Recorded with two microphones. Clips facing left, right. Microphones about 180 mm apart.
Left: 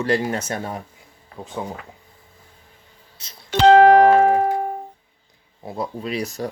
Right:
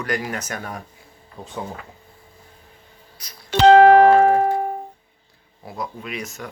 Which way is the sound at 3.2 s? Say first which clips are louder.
Right 1 dB; 25° left (ahead or behind).